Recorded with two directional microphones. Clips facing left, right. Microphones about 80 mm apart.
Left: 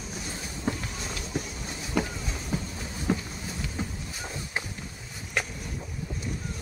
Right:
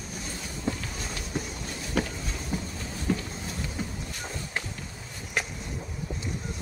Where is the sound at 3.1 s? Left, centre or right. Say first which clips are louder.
Left 1 dB; left.